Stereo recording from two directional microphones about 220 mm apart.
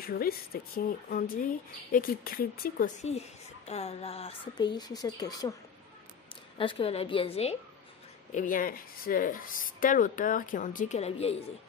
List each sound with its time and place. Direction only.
0.0 s speech: 40° left (ahead or behind); by 5.5 s 15° left (ahead or behind)
6.6 s a woman's voice: 25° left (ahead or behind)